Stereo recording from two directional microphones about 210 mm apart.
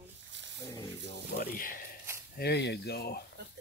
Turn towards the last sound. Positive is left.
turn(degrees=50)  # may be behind; listen again after turning